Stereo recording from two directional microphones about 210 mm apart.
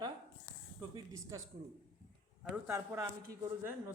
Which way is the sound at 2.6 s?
10° right (ahead or behind).